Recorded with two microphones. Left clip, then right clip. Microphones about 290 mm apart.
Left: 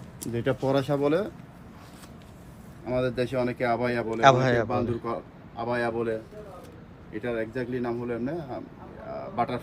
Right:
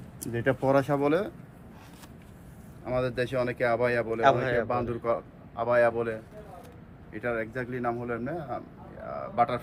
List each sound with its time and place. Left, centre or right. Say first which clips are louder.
0.7 s a man's voice: even; centre
2.8 s a man's voice: left 1 dB; centre
4.2 s a man's voice: left 5 dB; left
4.7 s a man's voice: right 1 dB; centre